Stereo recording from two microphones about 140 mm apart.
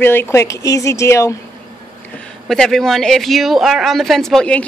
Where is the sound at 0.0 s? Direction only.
15° left (ahead or behind).